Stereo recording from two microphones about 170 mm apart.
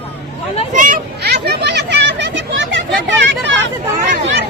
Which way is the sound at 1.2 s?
75° right (ahead or behind).